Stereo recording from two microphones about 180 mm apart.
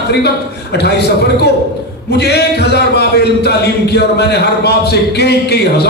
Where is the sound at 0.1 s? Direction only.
65° left (ahead or behind).